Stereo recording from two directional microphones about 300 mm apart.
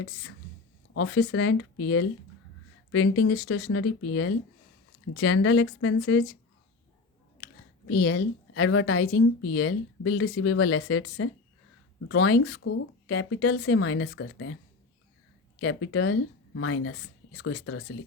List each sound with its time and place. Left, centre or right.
0.9 s speech: left
8.0 s speech: left
15.6 s speech: left